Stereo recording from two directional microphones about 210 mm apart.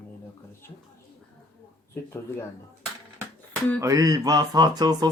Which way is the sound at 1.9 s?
10° left (ahead or behind).